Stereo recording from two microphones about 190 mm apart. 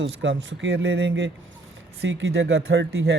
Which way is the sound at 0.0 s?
80° right.